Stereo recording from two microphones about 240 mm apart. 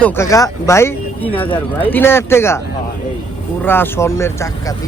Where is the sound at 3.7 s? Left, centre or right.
Centre.